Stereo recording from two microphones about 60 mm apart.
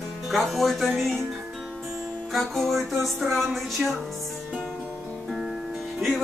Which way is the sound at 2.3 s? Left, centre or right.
Centre.